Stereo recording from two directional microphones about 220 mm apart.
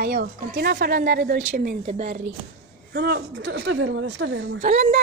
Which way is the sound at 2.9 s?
45° right (ahead or behind).